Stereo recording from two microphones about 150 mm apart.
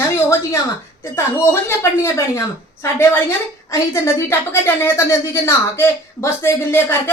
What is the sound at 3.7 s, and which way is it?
A woman's voice, 20° left (ahead or behind).